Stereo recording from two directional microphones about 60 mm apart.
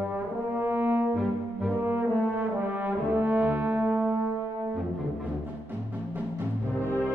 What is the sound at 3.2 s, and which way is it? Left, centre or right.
Brass instrument, right.